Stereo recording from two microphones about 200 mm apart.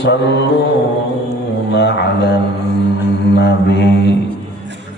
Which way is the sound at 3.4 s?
60° left (ahead or behind).